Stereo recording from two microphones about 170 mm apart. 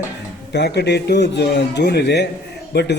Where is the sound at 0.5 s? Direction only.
85° left.